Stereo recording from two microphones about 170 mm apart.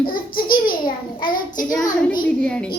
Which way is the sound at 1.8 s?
55° left (ahead or behind).